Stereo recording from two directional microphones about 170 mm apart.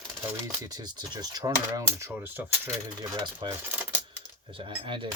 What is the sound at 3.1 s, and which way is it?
Speech, 25° right (ahead or behind).